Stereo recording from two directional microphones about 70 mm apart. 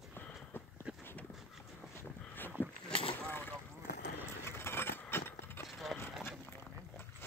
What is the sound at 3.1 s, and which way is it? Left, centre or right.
Boat, left.